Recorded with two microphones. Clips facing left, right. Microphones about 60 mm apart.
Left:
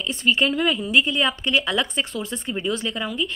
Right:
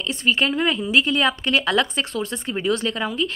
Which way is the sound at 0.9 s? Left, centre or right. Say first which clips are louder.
Right 2 dB; right.